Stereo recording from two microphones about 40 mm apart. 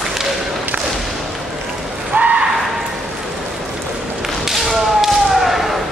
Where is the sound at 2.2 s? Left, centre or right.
Right.